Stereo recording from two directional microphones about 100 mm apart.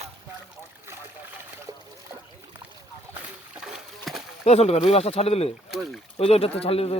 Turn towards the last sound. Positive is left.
turn(degrees=80)